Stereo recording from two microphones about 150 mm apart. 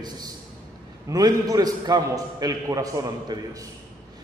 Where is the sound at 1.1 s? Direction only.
25° right (ahead or behind).